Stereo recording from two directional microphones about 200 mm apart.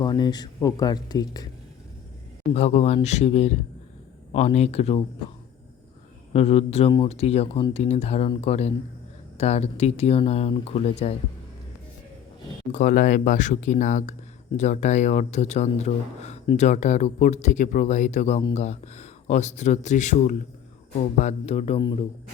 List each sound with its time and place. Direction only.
0.0 s speech: 20° left (ahead or behind)
2.5 s speech: 30° left (ahead or behind)
6.3 s speech: 30° left (ahead or behind)
12.7 s speech: 40° left (ahead or behind)